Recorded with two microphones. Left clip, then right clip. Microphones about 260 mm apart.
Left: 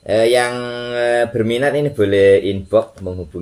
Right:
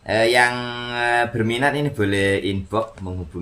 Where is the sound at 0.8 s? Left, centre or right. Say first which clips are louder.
Left 4 dB; right.